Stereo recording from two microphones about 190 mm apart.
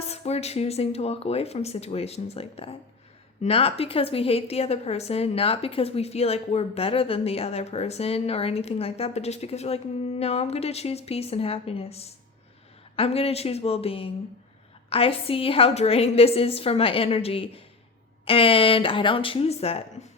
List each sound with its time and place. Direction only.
0.0 s a woman's voice: 35° left (ahead or behind)